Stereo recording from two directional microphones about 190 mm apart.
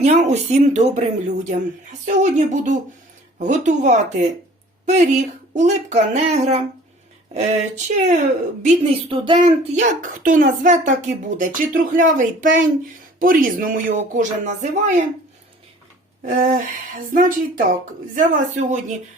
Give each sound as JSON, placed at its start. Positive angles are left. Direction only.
{"t": 0.0, "sound": "speech", "side_deg": -35}
{"t": 8.6, "sound": "speech", "side_deg": -25}
{"t": 9.7, "sound": "speech", "side_deg": -45}
{"t": 16.2, "sound": "speech", "side_deg": -45}